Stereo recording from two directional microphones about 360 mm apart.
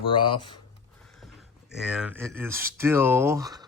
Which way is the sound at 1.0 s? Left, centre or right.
Centre.